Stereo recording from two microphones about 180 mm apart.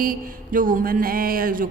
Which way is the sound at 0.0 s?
50° right (ahead or behind).